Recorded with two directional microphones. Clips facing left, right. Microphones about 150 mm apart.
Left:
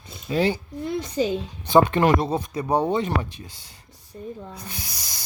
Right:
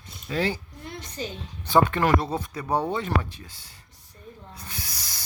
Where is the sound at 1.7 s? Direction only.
20° left (ahead or behind).